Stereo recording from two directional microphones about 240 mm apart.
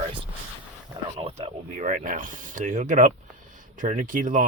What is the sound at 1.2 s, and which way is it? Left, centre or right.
Speech, right.